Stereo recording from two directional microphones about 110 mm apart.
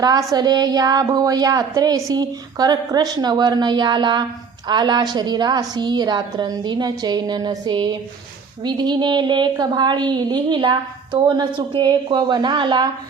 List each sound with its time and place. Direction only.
0.0 s a woman's voice: 35° right (ahead or behind)